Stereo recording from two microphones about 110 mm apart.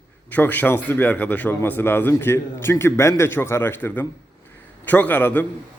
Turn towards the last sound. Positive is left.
turn(degrees=15)  # may be behind; listen again after turning